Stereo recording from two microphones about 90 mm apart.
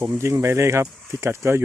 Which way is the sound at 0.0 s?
30° right (ahead or behind).